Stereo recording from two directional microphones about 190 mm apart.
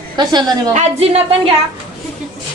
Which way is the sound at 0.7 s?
35° right (ahead or behind).